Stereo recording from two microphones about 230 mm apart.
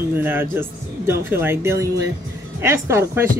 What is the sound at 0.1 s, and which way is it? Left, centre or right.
Speech, centre.